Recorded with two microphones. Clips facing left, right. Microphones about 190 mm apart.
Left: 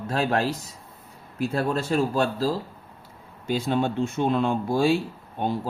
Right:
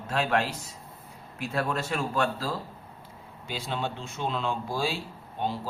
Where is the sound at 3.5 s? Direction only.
45° left (ahead or behind).